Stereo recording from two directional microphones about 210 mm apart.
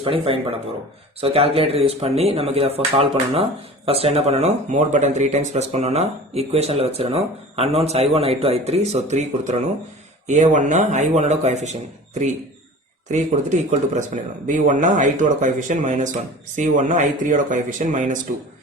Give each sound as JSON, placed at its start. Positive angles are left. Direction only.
{"t": 0.0, "sound": "speech", "side_deg": -25}
{"t": 13.1, "sound": "speech", "side_deg": -35}